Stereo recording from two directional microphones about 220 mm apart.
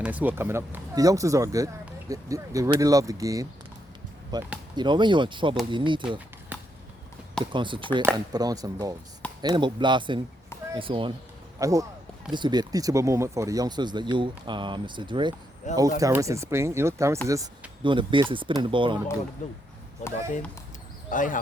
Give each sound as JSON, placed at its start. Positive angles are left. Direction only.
{"t": 0.0, "sound": "speech", "side_deg": -5}
{"t": 6.5, "sound": "a sound", "side_deg": -5}
{"t": 7.5, "sound": "speech", "side_deg": -20}
{"t": 15.6, "sound": "speech", "side_deg": 35}
{"t": 16.0, "sound": "speech", "side_deg": -15}
{"t": 21.1, "sound": "speech", "side_deg": 35}